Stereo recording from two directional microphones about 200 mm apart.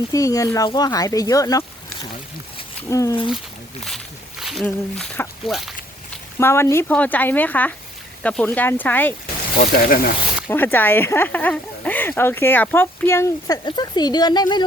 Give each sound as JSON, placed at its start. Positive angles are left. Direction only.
{"t": 0.1, "sound": "speech", "side_deg": 15}
{"t": 3.8, "sound": "speech", "side_deg": 0}
{"t": 6.4, "sound": "speech", "side_deg": 15}
{"t": 9.6, "sound": "speech", "side_deg": 45}
{"t": 10.5, "sound": "speech", "side_deg": 10}